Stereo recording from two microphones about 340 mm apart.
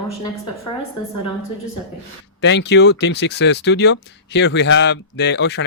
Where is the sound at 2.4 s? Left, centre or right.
Left.